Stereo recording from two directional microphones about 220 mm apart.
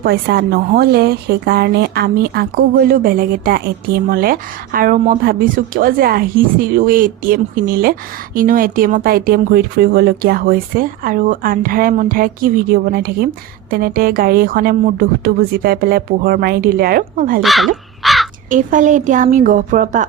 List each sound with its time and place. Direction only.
0.0 s a woman's voice: 50° right (ahead or behind)
17.4 s speech: centre (ahead or behind)
18.0 s crow: centre (ahead or behind)
18.5 s speech: 35° right (ahead or behind)